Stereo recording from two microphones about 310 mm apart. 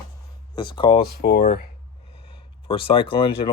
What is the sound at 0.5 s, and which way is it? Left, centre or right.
Speech, centre.